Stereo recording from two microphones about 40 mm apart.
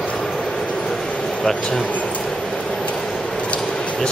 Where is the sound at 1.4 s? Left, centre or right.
Centre.